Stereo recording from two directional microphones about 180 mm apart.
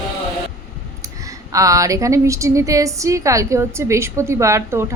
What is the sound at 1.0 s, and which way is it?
Speech, 20° right (ahead or behind).